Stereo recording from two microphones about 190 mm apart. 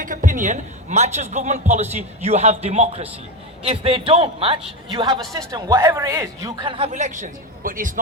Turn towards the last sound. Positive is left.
turn(degrees=-45)  # may be behind; listen again after turning